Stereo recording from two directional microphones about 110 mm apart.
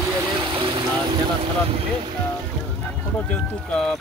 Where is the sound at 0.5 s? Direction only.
55° right (ahead or behind).